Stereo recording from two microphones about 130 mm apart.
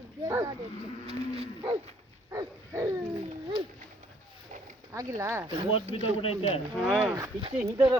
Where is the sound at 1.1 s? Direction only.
50° right (ahead or behind).